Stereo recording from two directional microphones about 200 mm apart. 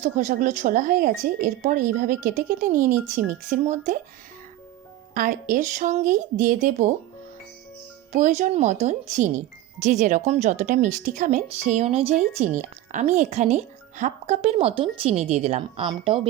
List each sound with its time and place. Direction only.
0.0 s speech: 40° right (ahead or behind)
3.6 s speech: 35° right (ahead or behind)
5.1 s speech: 40° right (ahead or behind)
8.1 s speech: 35° right (ahead or behind)